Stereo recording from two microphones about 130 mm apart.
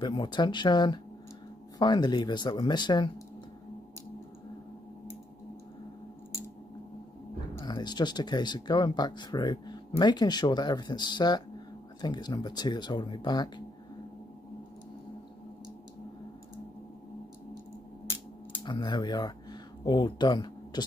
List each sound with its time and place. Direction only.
0.0 s speech: 35° left (ahead or behind)
7.6 s speech: 35° left (ahead or behind)
18.6 s speech: 35° left (ahead or behind)